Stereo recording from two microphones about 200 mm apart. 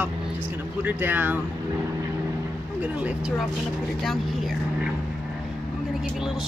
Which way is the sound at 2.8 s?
5° right (ahead or behind).